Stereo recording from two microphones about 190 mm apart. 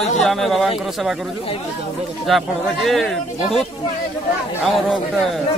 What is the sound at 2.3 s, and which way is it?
Speech, centre (ahead or behind).